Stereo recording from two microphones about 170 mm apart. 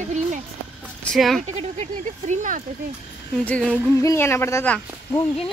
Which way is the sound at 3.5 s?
5° left (ahead or behind).